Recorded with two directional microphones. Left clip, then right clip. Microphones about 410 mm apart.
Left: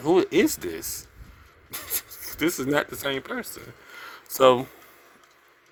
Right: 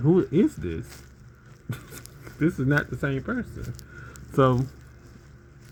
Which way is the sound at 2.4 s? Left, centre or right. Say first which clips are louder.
Left 1 dB; centre.